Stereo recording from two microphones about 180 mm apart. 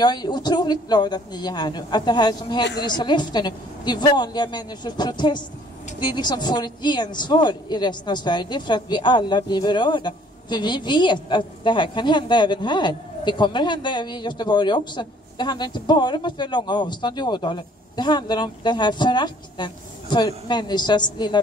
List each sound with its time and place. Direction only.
0.0 s a woman's voice: 25° left (ahead or behind)